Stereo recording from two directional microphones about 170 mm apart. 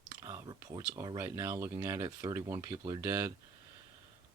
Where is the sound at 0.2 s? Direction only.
20° right (ahead or behind).